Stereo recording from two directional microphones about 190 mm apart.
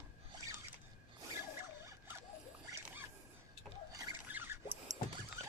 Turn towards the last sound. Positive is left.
turn(degrees=-10)  # may be behind; listen again after turning